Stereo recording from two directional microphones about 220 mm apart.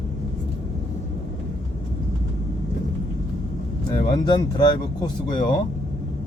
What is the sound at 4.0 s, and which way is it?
Speech, 20° left (ahead or behind).